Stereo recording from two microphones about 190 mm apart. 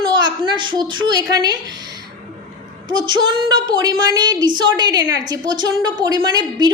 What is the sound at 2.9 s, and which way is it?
A woman's voice, 20° right (ahead or behind).